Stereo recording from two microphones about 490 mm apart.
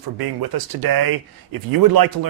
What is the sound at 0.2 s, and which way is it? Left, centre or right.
Speech, right.